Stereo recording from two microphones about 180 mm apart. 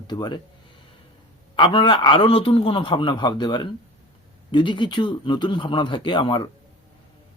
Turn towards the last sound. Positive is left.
turn(degrees=25)  # may be behind; listen again after turning